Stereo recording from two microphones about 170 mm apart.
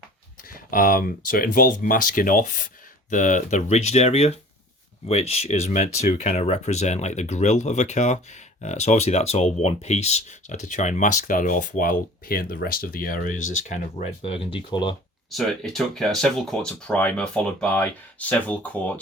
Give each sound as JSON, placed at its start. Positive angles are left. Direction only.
{"t": 0.7, "sound": "speech", "side_deg": 55}
{"t": 14.2, "sound": "speech", "side_deg": 30}
{"t": 15.3, "sound": "speech", "side_deg": 0}